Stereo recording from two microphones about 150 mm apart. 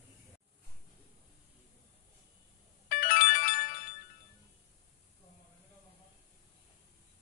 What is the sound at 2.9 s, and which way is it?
Music, 65° left (ahead or behind).